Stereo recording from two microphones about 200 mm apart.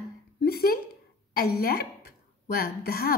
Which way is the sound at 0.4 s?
50° left (ahead or behind).